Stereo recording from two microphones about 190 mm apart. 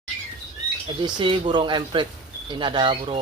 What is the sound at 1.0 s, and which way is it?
Speech, 25° right (ahead or behind).